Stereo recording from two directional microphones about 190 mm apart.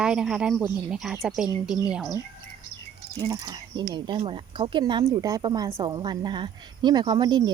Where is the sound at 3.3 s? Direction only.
20° right (ahead or behind).